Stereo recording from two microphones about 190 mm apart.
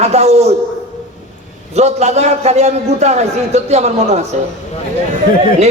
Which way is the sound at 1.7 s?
35° right (ahead or behind).